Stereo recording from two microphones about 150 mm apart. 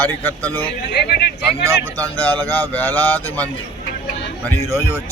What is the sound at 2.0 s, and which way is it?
Speech, 10° left (ahead or behind).